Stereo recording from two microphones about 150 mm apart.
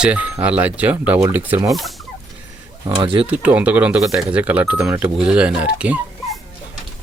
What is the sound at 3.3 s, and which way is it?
Speech, 10° right (ahead or behind).